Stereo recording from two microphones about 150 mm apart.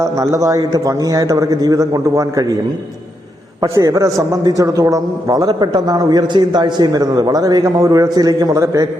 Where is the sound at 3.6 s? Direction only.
20° right (ahead or behind).